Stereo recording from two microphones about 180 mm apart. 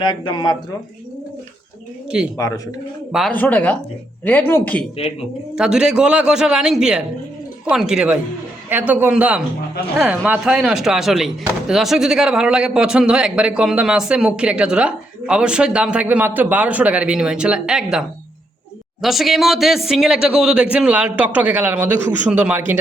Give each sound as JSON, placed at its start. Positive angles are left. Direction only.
{"t": 0.0, "sound": "speech", "side_deg": 25}
{"t": 2.0, "sound": "a man's voice", "side_deg": -5}
{"t": 3.3, "sound": "speech", "side_deg": 10}
{"t": 5.5, "sound": "a man's voice", "side_deg": -5}
{"t": 19.0, "sound": "a man's voice", "side_deg": 0}